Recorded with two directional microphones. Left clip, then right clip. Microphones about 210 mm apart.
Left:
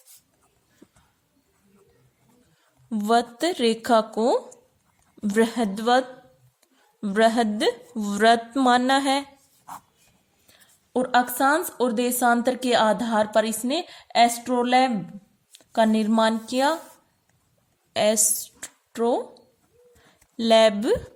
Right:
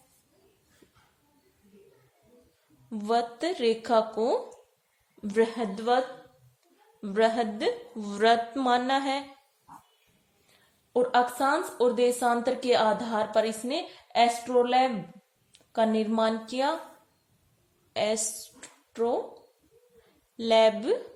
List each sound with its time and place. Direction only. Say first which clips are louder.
2.9 s a woman's voice: left 6 dB; 45° left (ahead or behind)
7.0 s a woman's voice: left 5 dB; 45° left (ahead or behind)
10.9 s a woman's voice: left 2 dB; 50° left (ahead or behind)
17.9 s a woman's voice: left 6 dB; 45° left (ahead or behind)
18.6 s a sound: left 4 dB; 50° left (ahead or behind)
20.3 s a woman's voice: left 4 dB; 45° left (ahead or behind)